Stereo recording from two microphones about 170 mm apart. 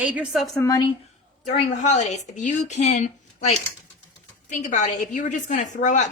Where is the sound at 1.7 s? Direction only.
45° left (ahead or behind).